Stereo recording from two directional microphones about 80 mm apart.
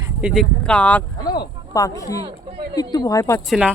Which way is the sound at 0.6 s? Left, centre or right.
Centre.